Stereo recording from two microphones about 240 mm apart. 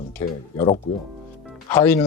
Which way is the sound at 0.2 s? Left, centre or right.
Centre.